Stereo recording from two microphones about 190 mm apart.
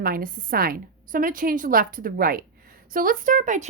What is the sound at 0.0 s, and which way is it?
A woman's voice, 50° right (ahead or behind).